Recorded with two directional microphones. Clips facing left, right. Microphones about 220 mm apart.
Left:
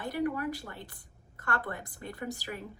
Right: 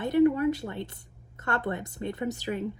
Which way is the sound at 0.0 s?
25° right (ahead or behind).